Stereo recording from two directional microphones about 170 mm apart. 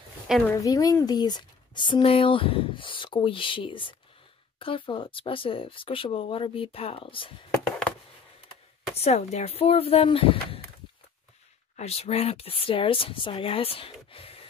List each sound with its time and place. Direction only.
0.5 s speech: 20° left (ahead or behind)
8.9 s speech: 40° left (ahead or behind)
11.7 s speech: 35° left (ahead or behind)
14.1 s gasp: 35° left (ahead or behind)